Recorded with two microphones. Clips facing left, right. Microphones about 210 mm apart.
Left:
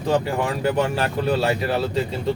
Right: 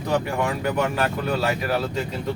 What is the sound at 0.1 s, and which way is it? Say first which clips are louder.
Speech: left 2 dB; 30° left (ahead or behind).